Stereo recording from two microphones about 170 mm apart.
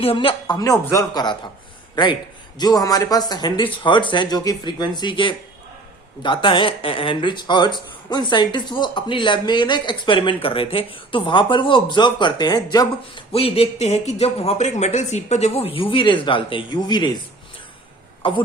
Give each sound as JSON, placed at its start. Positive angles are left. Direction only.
{"t": 0.0, "sound": "speech", "side_deg": 30}
{"t": 2.6, "sound": "speech", "side_deg": 20}
{"t": 13.3, "sound": "speech", "side_deg": 35}
{"t": 18.2, "sound": "speech", "side_deg": 30}